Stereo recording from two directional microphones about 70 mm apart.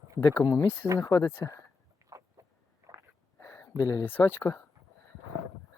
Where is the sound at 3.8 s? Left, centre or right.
Left.